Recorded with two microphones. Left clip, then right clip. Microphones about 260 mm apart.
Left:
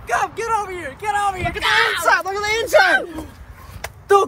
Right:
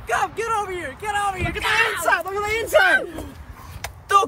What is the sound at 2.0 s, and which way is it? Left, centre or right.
Speech, centre.